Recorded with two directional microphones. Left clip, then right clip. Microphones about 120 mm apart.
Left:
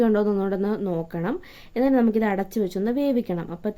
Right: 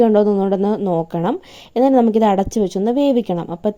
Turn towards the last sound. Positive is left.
turn(degrees=-45)  # may be behind; listen again after turning